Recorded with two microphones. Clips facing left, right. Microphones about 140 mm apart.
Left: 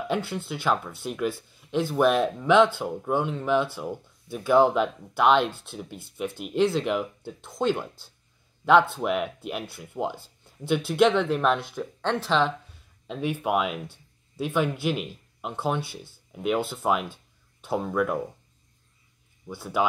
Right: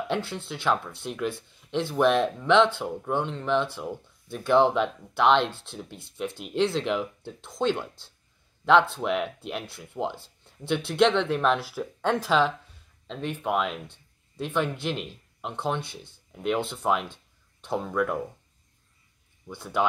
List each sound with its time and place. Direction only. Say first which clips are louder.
0.1 s speech: left 1 dB; centre (ahead or behind)
13.0 s speech: left 3 dB; 10° left (ahead or behind)
19.4 s speech: left 1 dB; 5° left (ahead or behind)